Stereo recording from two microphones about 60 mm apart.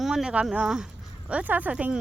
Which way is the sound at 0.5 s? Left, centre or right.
Centre.